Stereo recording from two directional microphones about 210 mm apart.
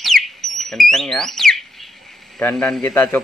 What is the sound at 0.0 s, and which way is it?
Alarm, centre (ahead or behind).